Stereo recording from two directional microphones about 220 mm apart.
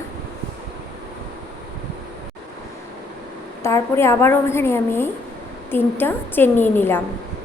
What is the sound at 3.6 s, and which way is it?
A woman's voice, 10° left (ahead or behind).